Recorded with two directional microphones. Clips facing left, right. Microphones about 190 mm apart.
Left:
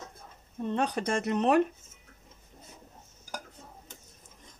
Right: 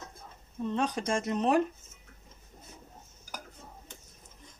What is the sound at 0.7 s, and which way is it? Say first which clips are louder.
Speech: left 1 dB; 60° left (ahead or behind).